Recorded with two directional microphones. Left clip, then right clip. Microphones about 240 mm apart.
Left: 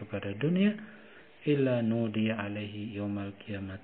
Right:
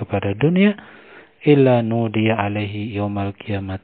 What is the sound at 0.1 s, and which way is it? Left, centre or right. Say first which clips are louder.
Speech: right 13 dB; right.